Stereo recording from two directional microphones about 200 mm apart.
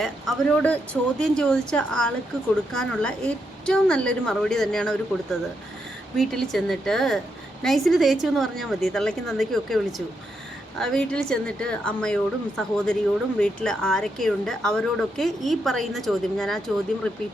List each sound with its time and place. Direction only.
0.0 s speech: 5° left (ahead or behind)